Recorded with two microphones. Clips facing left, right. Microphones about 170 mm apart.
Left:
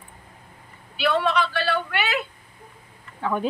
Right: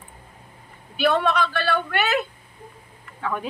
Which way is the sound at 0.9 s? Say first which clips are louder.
Right 1 dB; 45° right (ahead or behind).